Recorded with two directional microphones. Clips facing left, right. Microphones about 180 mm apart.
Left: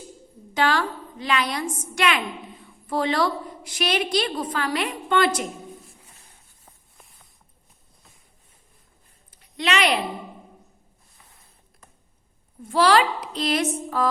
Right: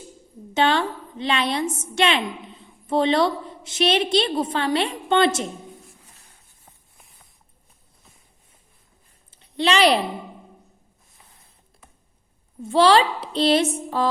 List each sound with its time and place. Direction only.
0.5 s a woman's voice: 25° right (ahead or behind)
9.3 s a sound: 30° right (ahead or behind)
12.6 s a woman's voice: 25° right (ahead or behind)